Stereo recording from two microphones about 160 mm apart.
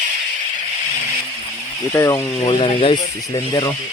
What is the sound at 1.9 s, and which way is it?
Speech, 15° left (ahead or behind).